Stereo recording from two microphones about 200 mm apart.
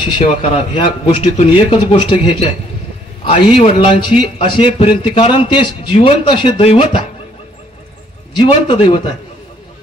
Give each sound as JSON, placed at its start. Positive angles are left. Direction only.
{"t": 0.0, "sound": "a man's voice", "side_deg": 25}
{"t": 3.5, "sound": "a man's voice", "side_deg": 25}
{"t": 8.4, "sound": "a man's voice", "side_deg": 25}